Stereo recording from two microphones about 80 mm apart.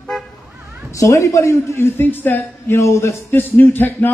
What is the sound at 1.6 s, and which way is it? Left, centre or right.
A man's voice, left.